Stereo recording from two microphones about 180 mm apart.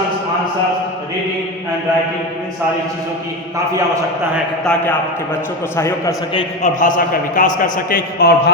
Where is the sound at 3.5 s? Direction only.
20° right (ahead or behind).